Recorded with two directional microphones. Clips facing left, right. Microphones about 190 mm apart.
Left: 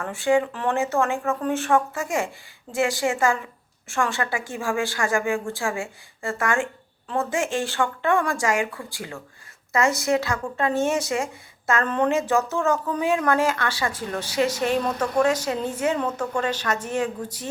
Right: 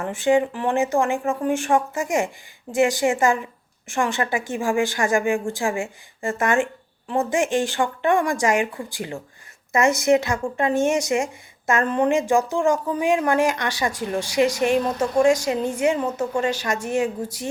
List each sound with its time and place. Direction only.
0.0 s a woman's voice: 20° right (ahead or behind)